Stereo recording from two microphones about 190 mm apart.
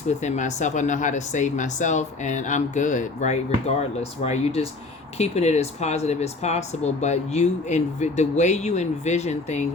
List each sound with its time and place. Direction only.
0.2 s speech: 40° left (ahead or behind)